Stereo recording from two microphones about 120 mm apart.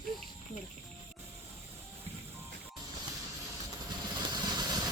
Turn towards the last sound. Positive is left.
turn(degrees=-35)  # may be behind; listen again after turning